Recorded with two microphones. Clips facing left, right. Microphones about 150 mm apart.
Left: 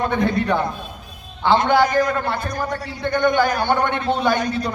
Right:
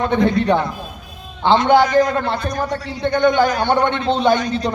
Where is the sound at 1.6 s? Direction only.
20° right (ahead or behind).